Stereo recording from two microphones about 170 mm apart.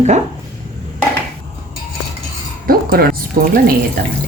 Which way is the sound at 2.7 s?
60° right (ahead or behind).